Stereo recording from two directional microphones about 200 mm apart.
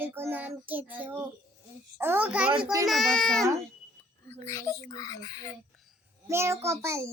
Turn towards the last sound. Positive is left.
turn(degrees=-15)  # may be behind; listen again after turning